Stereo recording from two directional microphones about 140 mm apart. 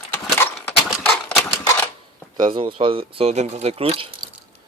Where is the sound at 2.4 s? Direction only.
35° right (ahead or behind).